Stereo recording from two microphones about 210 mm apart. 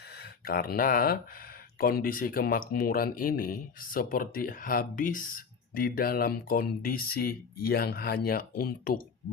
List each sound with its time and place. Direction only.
0.2 s speech: 45° left (ahead or behind)